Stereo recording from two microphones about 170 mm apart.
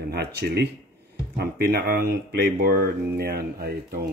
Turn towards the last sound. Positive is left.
turn(degrees=-65)  # may be behind; listen again after turning